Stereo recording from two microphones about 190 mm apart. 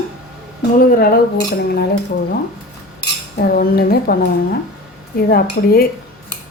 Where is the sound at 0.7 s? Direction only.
50° left (ahead or behind).